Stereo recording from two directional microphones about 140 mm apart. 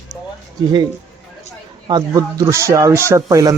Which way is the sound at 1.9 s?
30° right (ahead or behind).